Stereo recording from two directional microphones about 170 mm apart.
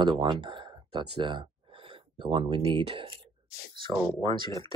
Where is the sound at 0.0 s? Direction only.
30° right (ahead or behind).